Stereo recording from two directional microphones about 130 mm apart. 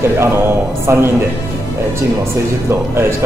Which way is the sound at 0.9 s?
20° right (ahead or behind).